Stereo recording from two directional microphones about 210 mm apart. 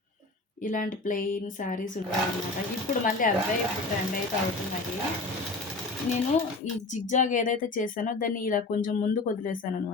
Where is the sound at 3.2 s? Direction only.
40° left (ahead or behind).